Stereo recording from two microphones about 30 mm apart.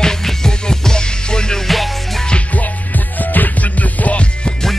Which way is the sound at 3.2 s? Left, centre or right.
Left.